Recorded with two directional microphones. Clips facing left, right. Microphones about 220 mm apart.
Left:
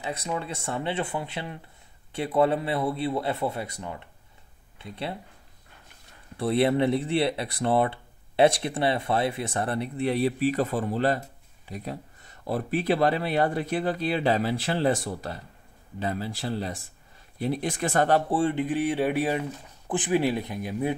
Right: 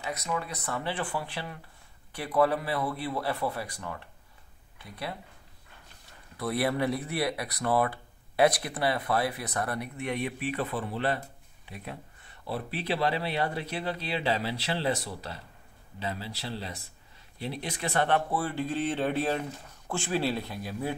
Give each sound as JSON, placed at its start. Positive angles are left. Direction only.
{"t": 0.0, "sound": "speech", "side_deg": 25}
{"t": 6.3, "sound": "speech", "side_deg": 25}
{"t": 18.4, "sound": "speech", "side_deg": 20}